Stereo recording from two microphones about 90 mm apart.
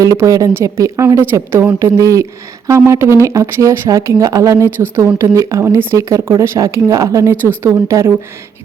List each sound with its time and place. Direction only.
0.0 s a woman's voice: 40° right (ahead or behind)